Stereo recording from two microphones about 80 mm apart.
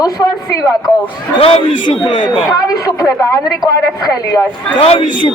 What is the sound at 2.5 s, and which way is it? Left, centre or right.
A woman's voice, left.